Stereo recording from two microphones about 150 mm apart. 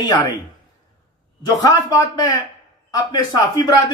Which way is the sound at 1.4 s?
25° left (ahead or behind).